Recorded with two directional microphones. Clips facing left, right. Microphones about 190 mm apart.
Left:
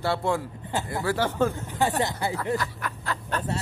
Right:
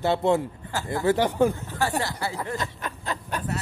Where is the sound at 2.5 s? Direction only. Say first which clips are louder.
Left 2 dB; 20° right (ahead or behind).